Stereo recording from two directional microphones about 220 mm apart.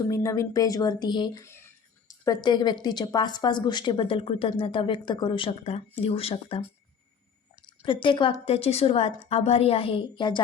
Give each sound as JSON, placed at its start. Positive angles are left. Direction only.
{"t": 0.1, "sound": "speech", "side_deg": 15}
{"t": 7.8, "sound": "speech", "side_deg": 20}